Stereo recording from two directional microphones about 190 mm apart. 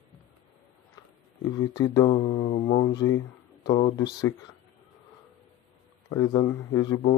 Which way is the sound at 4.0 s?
20° left (ahead or behind).